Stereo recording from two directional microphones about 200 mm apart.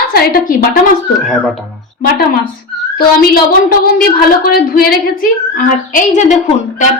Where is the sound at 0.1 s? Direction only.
50° left (ahead or behind).